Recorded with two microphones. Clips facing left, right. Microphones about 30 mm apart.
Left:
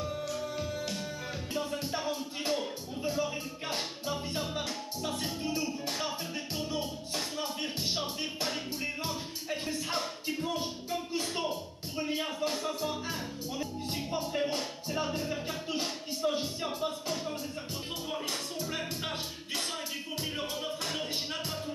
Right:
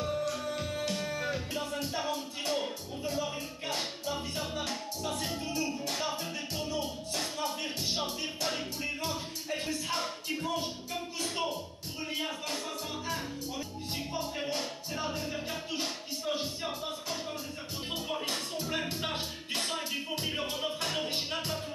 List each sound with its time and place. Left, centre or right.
0.3 s music: centre
3.1 s music: centre
12.0 s music: centre